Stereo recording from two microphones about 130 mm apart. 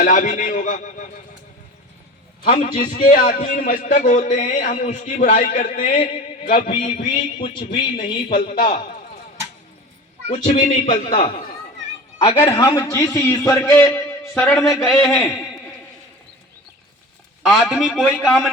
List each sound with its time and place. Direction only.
0.0 s a man's voice: 75° left (ahead or behind)
2.4 s a man's voice: 90° left; by 5.8 s 70° left (ahead or behind)
5.8 s a sound: 50° left (ahead or behind)
7.1 s a man's voice: 40° left (ahead or behind)
10.2 s a man's voice: 60° left (ahead or behind); by 11.2 s 75° left (ahead or behind)
12.4 s a man's voice: 40° left (ahead or behind)
12.6 s a man's voice: 25° left (ahead or behind)
13.1 s a man's voice: 20° left (ahead or behind)
17.4 s a man's voice: centre (ahead or behind)